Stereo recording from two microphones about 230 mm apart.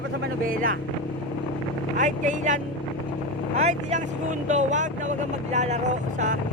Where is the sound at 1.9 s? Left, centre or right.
Right.